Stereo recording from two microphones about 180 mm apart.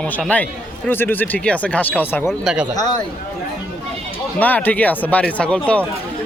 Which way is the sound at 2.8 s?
20° left (ahead or behind).